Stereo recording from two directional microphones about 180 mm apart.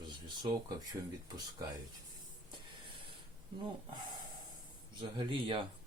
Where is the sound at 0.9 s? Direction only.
20° right (ahead or behind).